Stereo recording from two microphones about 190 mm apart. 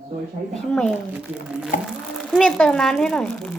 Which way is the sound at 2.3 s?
Centre (ahead or behind).